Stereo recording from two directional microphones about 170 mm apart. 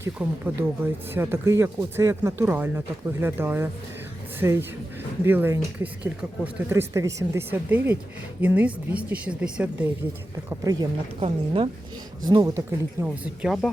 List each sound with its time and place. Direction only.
0.0 s speech: 10° right (ahead or behind)
10.5 s a man's voice: 20° right (ahead or behind)
11.2 s speech: 35° right (ahead or behind); by 13.7 s centre (ahead or behind)